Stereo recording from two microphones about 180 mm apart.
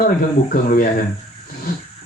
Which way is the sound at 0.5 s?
50° left (ahead or behind).